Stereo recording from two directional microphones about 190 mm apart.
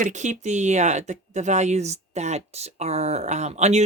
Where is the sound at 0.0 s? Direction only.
40° right (ahead or behind).